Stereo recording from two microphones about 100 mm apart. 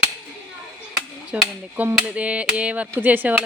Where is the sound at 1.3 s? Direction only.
15° right (ahead or behind).